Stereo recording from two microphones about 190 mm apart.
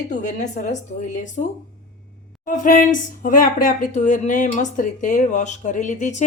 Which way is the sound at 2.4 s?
45° left (ahead or behind).